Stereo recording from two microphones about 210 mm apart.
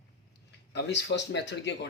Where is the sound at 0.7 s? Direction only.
55° left (ahead or behind).